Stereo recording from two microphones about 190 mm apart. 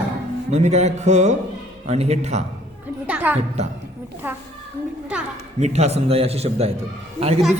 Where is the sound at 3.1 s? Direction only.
10° right (ahead or behind).